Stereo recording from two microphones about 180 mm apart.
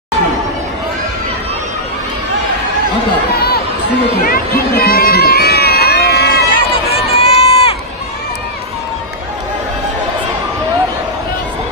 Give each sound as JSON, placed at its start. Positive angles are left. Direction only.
{"t": 4.3, "sound": "crowd", "side_deg": 60}
{"t": 7.1, "sound": "run", "side_deg": 35}